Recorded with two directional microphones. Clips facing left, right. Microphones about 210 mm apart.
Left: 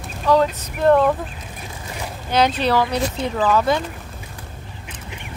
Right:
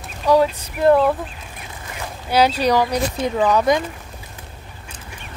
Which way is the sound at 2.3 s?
10° right (ahead or behind).